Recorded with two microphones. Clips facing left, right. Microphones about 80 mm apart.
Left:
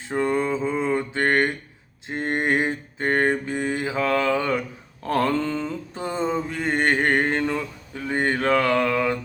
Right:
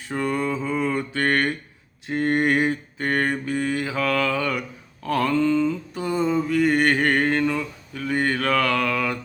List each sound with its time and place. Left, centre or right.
0.1 s mantra: left
2.0 s a sound: left
5.0 s mantra: left